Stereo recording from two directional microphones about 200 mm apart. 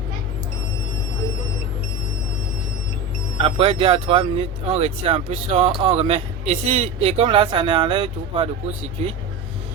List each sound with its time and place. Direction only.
3.4 s speech: 25° right (ahead or behind)